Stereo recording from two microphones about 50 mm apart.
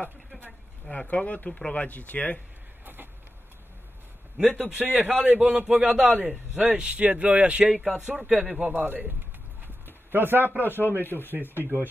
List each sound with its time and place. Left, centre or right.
0.9 s speech: left
2.8 s vehicle: right
4.4 s speech: centre
4.9 s a man's voice: right
5.7 s a man's voice: centre
7.7 s speech: centre
8.7 s speech: right
10.1 s speech: right
10.6 s speech: left
11.5 s speech: right